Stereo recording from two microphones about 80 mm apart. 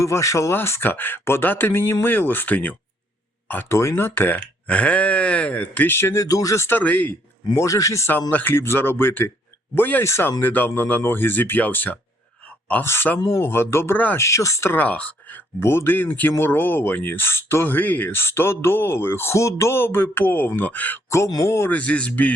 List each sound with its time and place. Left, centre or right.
0.0 s speech: left; by 2.7 s centre
3.7 s speech: left
6.2 s speech: left
6.7 s speech: left
7.5 s speech: left
8.3 s speech: left
10.0 s speech: left
10.4 s speech: left
12.5 s a sound: centre
12.8 s speech: left
14.8 s speech: centre
15.6 s speech: left
21.4 s speech: left
21.7 s speech: centre